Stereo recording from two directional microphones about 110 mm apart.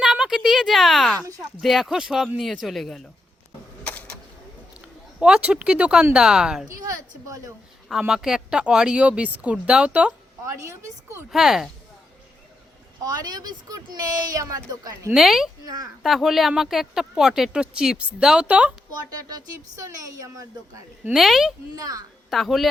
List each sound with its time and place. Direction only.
0.0 s a woman's voice: 5° right (ahead or behind)
3.8 s a sound: 10° left (ahead or behind)
5.2 s speech: 10° right (ahead or behind)
6.8 s speech: 30° right (ahead or behind)
7.9 s speech: 5° right (ahead or behind)
10.4 s speech: 25° right (ahead or behind)
11.3 s speech: 5° right (ahead or behind)
13.0 s a woman's voice: 35° right (ahead or behind)
15.1 s speech: 5° right (ahead or behind)
15.6 s a woman's voice: 35° right (ahead or behind)
16.0 s speech: centre (ahead or behind)
19.1 s a woman's voice: 30° right (ahead or behind)
21.1 s speech: centre (ahead or behind)